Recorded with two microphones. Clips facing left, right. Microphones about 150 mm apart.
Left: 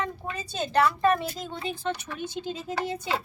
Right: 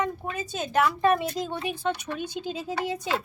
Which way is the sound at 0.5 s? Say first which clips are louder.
Left 1 dB; 5° right (ahead or behind).